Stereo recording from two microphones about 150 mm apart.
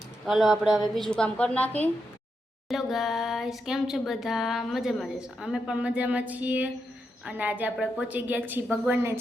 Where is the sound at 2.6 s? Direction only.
Centre (ahead or behind).